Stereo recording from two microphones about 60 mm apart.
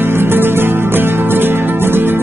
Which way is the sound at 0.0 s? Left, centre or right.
Right.